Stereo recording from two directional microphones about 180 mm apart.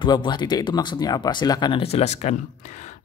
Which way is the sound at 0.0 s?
25° left (ahead or behind).